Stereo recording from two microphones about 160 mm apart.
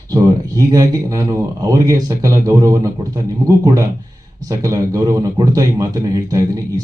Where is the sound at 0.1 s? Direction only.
20° right (ahead or behind).